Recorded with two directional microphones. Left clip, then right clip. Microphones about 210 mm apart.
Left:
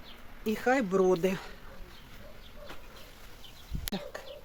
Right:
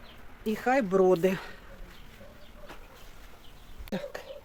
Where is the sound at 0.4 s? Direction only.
25° right (ahead or behind).